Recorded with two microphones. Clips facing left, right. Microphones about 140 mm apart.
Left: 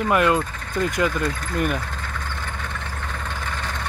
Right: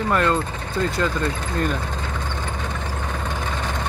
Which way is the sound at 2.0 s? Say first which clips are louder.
Right 3 dB; 20° right (ahead or behind).